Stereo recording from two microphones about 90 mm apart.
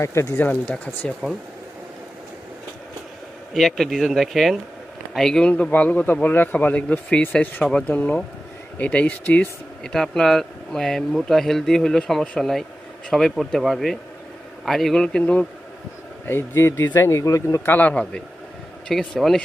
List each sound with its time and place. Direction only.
0.0 s a man's voice: 30° left (ahead or behind)
1.2 s a man's voice: 15° left (ahead or behind)
3.5 s a man's voice: centre (ahead or behind); by 9.5 s 20° left (ahead or behind)
9.8 s a man's voice: 5° left (ahead or behind)
16.2 s a man's voice: 30° left (ahead or behind)
17.7 s a man's voice: 20° left (ahead or behind)
18.9 s speech: 5° left (ahead or behind)